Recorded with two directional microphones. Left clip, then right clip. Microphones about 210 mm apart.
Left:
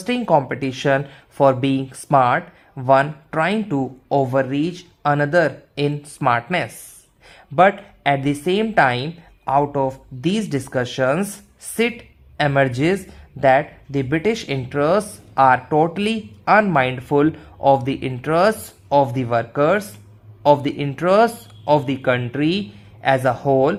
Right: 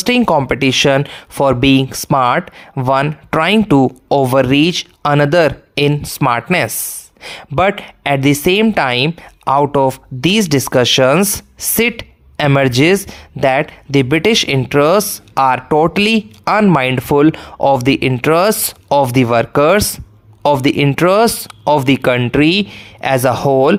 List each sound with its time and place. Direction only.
0.0 s speech: 30° right (ahead or behind)